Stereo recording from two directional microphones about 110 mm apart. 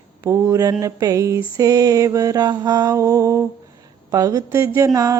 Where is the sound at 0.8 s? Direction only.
30° right (ahead or behind).